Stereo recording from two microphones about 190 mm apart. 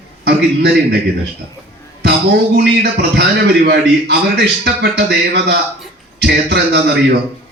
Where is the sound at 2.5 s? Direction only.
60° right (ahead or behind).